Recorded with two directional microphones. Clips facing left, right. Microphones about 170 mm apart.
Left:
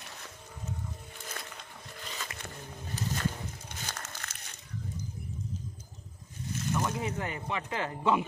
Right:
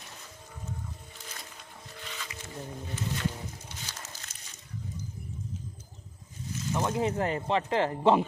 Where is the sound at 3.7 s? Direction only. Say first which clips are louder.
Left 2 dB; 55° left (ahead or behind).